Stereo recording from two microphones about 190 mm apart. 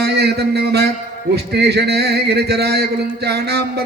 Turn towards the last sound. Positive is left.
turn(degrees=-60)  # may be behind; listen again after turning